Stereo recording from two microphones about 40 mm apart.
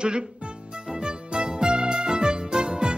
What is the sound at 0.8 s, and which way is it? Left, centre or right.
Music, centre.